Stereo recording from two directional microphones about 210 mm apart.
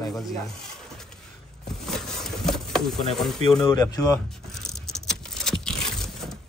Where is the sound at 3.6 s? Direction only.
15° left (ahead or behind).